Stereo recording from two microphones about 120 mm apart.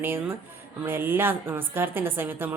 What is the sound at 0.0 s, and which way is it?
A woman's voice, 20° right (ahead or behind).